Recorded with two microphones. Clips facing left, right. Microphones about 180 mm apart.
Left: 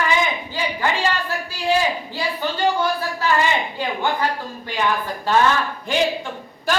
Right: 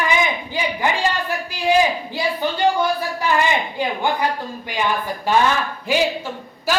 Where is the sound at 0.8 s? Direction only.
15° right (ahead or behind).